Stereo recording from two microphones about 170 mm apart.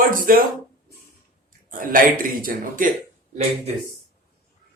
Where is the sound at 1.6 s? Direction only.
55° right (ahead or behind).